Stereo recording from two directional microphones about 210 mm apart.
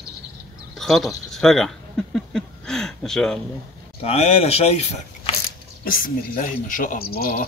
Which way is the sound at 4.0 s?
30° left (ahead or behind).